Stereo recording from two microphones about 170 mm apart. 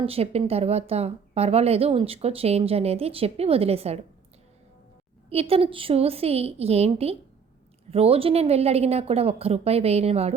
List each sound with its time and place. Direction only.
0.0 s a woman's voice: 35° right (ahead or behind)
5.3 s a woman's voice: 35° right (ahead or behind)